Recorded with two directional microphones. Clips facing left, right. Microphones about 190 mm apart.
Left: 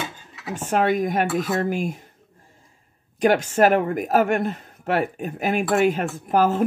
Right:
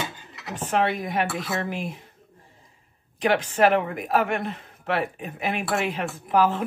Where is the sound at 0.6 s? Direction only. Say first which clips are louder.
Left 4 dB; 45° left (ahead or behind).